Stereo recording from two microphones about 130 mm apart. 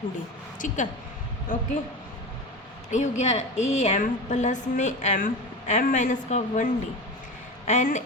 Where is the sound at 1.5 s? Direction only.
90° left.